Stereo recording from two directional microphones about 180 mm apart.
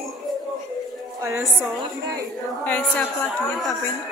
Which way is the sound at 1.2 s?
15° right (ahead or behind).